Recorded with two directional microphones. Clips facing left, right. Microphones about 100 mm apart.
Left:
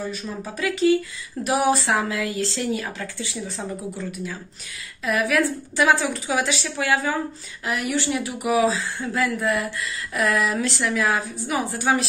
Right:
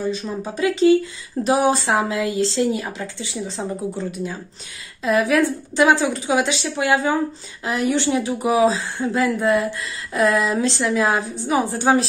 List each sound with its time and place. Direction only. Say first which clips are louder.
0.1 s speech: right 5 dB; 25° right (ahead or behind)